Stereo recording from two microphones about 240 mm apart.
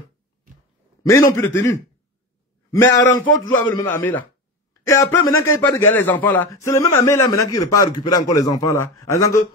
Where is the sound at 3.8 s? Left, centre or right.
Centre.